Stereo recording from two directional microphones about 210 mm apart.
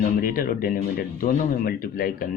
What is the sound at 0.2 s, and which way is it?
Speech, 40° left (ahead or behind).